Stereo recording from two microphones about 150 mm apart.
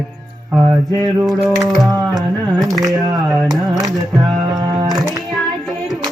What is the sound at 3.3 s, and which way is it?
Music, 25° right (ahead or behind).